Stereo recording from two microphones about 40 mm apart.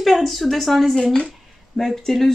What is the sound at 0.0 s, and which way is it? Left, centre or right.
Speech, centre.